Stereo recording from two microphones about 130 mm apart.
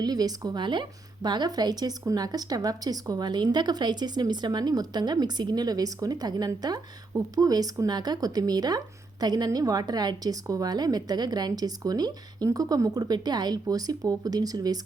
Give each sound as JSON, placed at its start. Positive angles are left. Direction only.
{"t": 0.0, "sound": "a woman's voice", "side_deg": -30}